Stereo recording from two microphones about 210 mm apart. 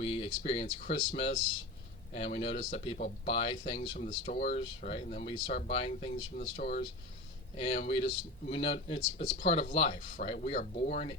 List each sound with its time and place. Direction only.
0.0 s speech: 25° left (ahead or behind)
6.3 s speech: 40° left (ahead or behind)
7.5 s speech: 25° left (ahead or behind)